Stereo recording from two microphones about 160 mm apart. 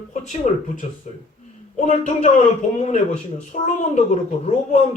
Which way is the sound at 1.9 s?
45° left (ahead or behind).